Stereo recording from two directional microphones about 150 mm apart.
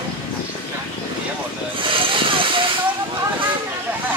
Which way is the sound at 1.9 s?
35° right (ahead or behind).